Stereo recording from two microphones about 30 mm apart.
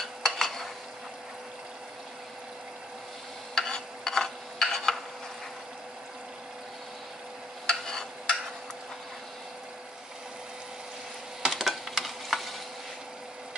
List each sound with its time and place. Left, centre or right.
0.0 s stir: centre
3.5 s a sound: centre
7.6 s stir: centre
11.5 s stir: centre